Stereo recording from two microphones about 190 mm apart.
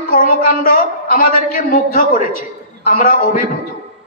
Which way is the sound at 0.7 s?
45° left (ahead or behind).